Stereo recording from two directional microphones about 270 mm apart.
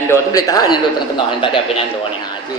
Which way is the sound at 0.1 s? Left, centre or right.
Centre.